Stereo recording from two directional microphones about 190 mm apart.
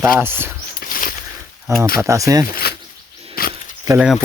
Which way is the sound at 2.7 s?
55° left (ahead or behind).